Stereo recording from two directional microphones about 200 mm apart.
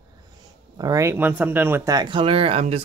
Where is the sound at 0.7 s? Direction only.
20° right (ahead or behind).